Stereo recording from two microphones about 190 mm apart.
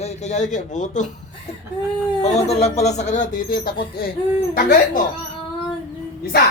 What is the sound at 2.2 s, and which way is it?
Speech, 35° left (ahead or behind).